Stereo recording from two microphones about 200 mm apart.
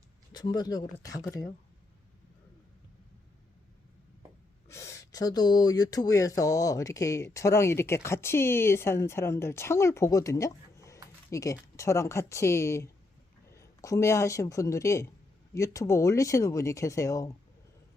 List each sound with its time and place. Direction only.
0.3 s speech: 20° left (ahead or behind)
4.7 s a woman's voice: 15° left (ahead or behind)